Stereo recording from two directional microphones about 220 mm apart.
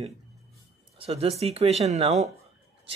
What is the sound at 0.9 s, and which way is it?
Speech, 25° right (ahead or behind).